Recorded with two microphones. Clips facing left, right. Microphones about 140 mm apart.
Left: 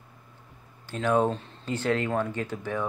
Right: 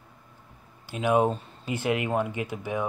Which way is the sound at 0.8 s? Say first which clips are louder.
Right 1 dB; 10° right (ahead or behind).